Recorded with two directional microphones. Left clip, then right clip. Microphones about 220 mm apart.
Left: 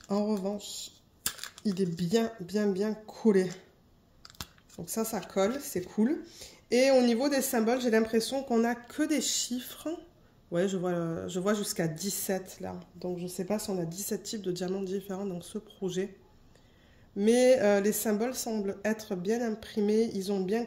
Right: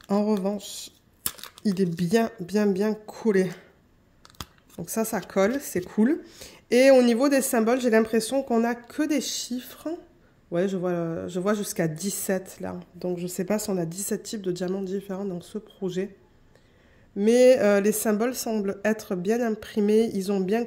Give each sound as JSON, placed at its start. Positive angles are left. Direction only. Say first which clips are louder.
{"t": 0.0, "sound": "speech", "louder": "right 6 dB", "side_deg": -30}
{"t": 4.8, "sound": "speech", "louder": "right 6 dB", "side_deg": -35}
{"t": 17.2, "sound": "speech", "louder": "right 5 dB", "side_deg": -25}